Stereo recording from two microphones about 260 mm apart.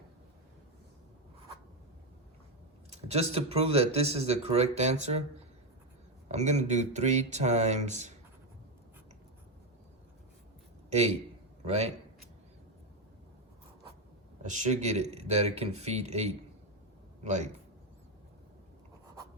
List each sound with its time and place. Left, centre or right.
2.9 s speech: right
6.2 s speech: right
10.8 s a sound: right
11.6 s a man's voice: right
14.4 s speech: right